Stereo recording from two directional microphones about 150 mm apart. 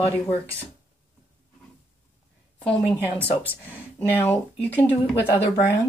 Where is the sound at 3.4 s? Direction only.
15° left (ahead or behind).